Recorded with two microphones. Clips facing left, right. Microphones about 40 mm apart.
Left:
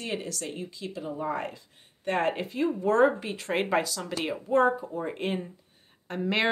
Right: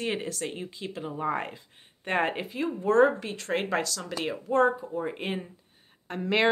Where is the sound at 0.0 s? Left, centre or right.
Right.